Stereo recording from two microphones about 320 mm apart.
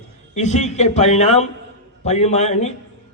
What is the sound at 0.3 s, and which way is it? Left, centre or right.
A man's voice, left.